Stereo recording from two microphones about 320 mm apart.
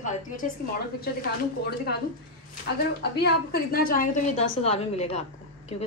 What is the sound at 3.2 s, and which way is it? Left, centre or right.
Speech, left.